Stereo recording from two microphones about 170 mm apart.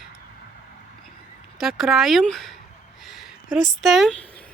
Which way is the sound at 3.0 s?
Centre (ahead or behind).